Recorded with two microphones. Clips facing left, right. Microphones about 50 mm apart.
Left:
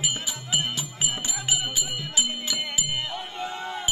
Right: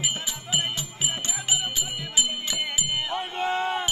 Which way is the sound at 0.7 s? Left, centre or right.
Centre.